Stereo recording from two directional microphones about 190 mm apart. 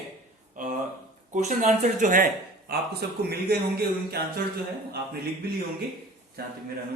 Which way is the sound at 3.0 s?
60° right (ahead or behind).